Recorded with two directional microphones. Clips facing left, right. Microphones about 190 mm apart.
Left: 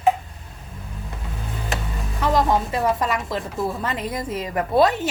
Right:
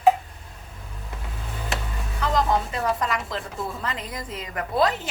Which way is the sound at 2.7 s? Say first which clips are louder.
Left 4 dB; 25° left (ahead or behind).